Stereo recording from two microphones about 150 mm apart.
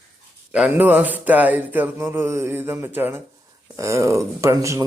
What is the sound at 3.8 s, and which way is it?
Speech, 20° right (ahead or behind).